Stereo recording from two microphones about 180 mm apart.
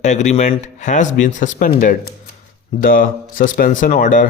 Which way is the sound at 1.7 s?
55° left (ahead or behind).